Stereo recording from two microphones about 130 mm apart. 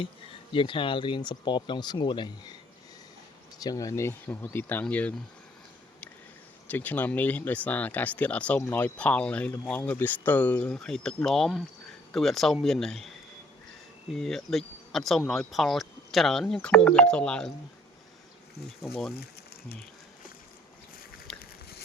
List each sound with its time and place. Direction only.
0.5 s speech: 40° left (ahead or behind)
3.6 s speech: 25° left (ahead or behind); by 5.1 s 10° left (ahead or behind)
6.7 s speech: 15° left (ahead or behind)
14.1 s speech: 5° left (ahead or behind)
18.8 s speech: centre (ahead or behind)
21.3 s a sound: 5° left (ahead or behind)